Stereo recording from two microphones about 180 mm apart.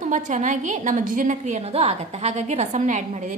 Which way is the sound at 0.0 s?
40° right (ahead or behind).